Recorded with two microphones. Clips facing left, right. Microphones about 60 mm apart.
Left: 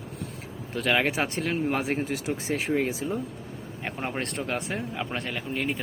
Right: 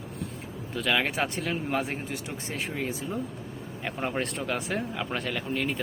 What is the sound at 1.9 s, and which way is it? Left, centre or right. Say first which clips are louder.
Speech: left 6 dB; left.